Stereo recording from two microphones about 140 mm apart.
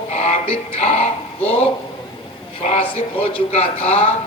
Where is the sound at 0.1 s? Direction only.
50° left (ahead or behind).